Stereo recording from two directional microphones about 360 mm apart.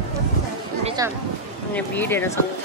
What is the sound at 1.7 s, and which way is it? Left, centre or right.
Speech, centre.